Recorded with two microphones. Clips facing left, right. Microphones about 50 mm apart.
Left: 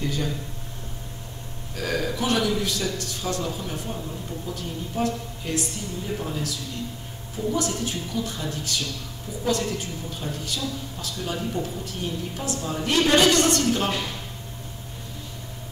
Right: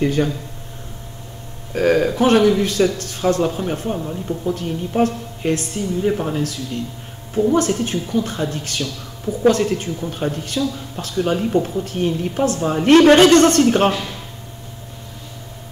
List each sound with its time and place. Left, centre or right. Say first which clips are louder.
0.0 s speech: right 10 dB; right
1.7 s speech: right 11 dB; right